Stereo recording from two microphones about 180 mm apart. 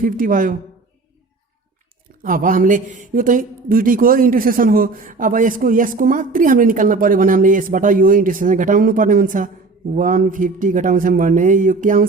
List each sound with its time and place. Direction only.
0.0 s speech: 50° right (ahead or behind)
2.2 s speech: 50° right (ahead or behind)